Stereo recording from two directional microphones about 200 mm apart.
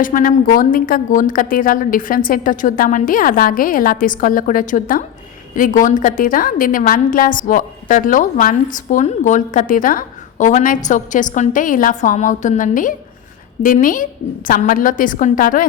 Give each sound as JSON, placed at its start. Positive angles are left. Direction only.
{"t": 0.0, "sound": "a woman's voice", "side_deg": 45}